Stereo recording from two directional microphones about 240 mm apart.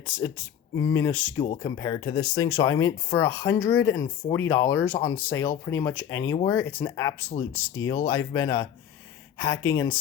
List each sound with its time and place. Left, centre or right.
0.2 s speech: centre
4.0 s speech: centre
4.4 s speech: centre